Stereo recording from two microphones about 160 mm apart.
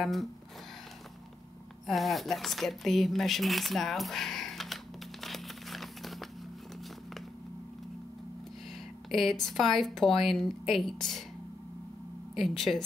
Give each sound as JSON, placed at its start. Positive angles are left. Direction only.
{"t": 0.0, "sound": "speech", "side_deg": 0}
{"t": 1.9, "sound": "speech", "side_deg": 0}
{"t": 5.2, "sound": "crumpling", "side_deg": 0}
{"t": 9.1, "sound": "speech", "side_deg": 0}
{"t": 12.4, "sound": "speech", "side_deg": 0}